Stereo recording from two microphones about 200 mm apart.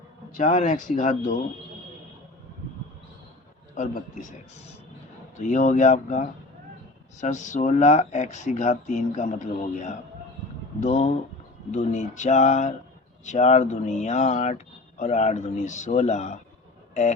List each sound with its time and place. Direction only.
0.3 s speech: 40° left (ahead or behind)
3.8 s speech: 40° left (ahead or behind)